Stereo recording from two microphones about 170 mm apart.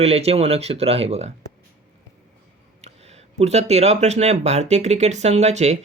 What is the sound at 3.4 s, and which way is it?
Speech, 40° right (ahead or behind).